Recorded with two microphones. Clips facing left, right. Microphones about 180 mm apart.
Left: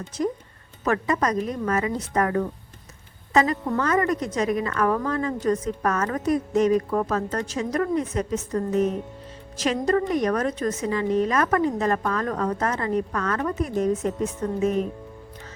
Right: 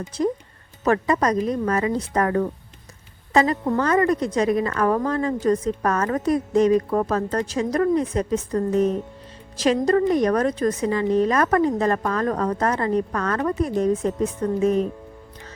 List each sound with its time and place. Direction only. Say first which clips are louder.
0.1 s a woman's voice: right 3 dB; 30° right (ahead or behind)